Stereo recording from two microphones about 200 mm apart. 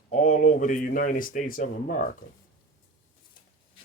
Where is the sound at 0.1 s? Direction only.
35° left (ahead or behind).